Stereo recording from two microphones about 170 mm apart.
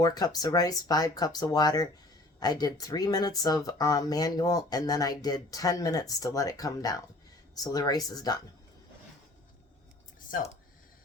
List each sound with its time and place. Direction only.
0.0 s speech: 20° left (ahead or behind)